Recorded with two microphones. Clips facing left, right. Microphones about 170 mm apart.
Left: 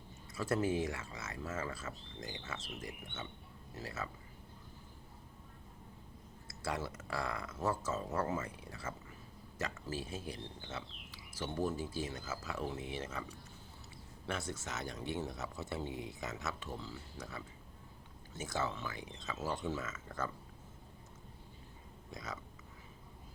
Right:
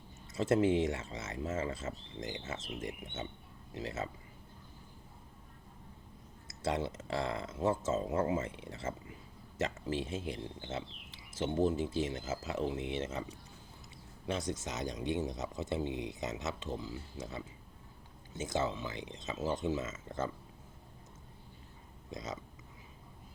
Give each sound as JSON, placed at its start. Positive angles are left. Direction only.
{"t": 0.3, "sound": "speech", "side_deg": -20}
{"t": 6.5, "sound": "speech", "side_deg": -20}
{"t": 14.3, "sound": "speech", "side_deg": -20}
{"t": 22.1, "sound": "speech", "side_deg": -20}